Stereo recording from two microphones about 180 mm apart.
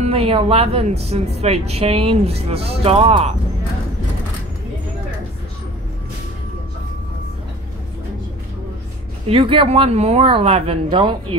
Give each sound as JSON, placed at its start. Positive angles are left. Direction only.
{"t": 0.0, "sound": "speech", "side_deg": -35}
{"t": 9.3, "sound": "speech", "side_deg": -30}